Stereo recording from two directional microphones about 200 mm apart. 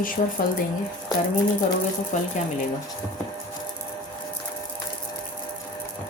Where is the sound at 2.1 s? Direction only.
35° left (ahead or behind).